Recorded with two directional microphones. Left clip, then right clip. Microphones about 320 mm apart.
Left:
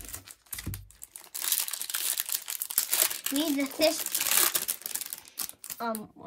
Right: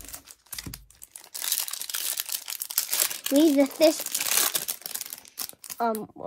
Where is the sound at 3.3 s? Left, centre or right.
Centre.